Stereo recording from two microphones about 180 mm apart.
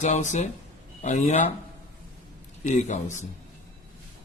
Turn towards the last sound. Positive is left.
turn(degrees=40)  # may be behind; listen again after turning